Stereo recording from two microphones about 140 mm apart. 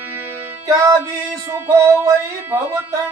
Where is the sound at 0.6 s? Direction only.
25° right (ahead or behind).